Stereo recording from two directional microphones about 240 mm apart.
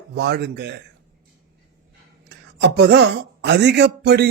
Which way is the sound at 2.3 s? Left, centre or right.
Right.